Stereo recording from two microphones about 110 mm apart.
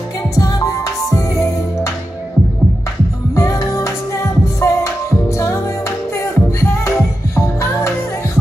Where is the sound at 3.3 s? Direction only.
25° left (ahead or behind).